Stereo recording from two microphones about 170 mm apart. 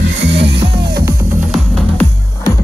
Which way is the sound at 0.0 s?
90° right.